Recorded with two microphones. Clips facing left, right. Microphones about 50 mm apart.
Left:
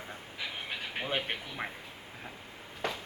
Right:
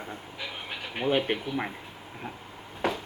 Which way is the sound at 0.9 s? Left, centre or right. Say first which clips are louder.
Right 9 dB; centre.